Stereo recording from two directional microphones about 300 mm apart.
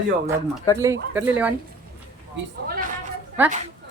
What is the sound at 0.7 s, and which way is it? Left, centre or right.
Speech, centre.